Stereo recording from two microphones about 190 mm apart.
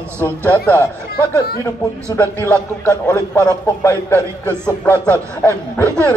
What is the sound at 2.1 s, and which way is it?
A man's voice, 15° left (ahead or behind).